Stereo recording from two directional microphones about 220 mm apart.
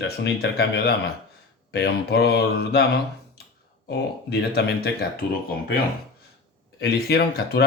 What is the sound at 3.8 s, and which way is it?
A man's voice, 50° left (ahead or behind).